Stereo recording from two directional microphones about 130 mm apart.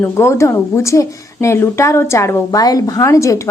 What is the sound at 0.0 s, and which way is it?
A woman's voice, 20° left (ahead or behind).